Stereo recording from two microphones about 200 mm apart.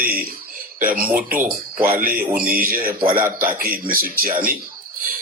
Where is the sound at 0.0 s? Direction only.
45° right (ahead or behind).